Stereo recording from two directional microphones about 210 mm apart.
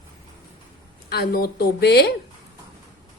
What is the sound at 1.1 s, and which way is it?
A woman's voice, 50° left (ahead or behind).